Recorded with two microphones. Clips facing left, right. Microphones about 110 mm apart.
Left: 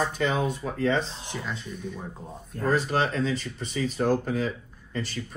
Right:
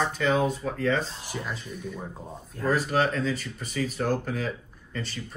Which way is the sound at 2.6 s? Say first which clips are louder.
Even; 45° left (ahead or behind).